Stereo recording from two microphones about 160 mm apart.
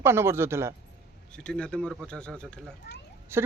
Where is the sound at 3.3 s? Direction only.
15° right (ahead or behind).